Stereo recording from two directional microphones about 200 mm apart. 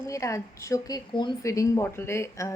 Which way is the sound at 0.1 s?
15° left (ahead or behind).